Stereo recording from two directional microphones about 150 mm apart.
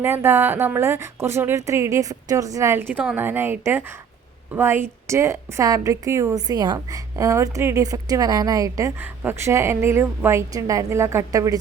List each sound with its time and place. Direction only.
0.0 s a woman's voice: 15° right (ahead or behind)